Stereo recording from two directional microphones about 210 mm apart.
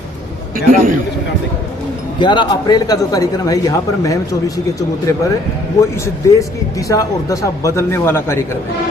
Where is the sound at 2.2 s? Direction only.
20° left (ahead or behind).